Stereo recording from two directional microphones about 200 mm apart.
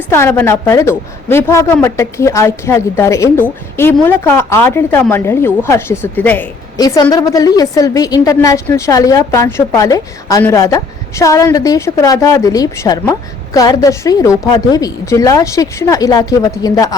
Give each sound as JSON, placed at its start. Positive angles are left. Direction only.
{"t": 0.1, "sound": "a woman's voice", "side_deg": 10}